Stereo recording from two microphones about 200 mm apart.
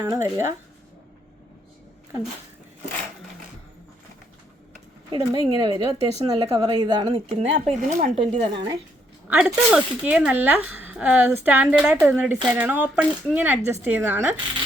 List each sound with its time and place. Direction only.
0.0 s speech: 15° right (ahead or behind)
5.2 s a woman's voice: 20° right (ahead or behind)
9.2 s speech: 5° right (ahead or behind)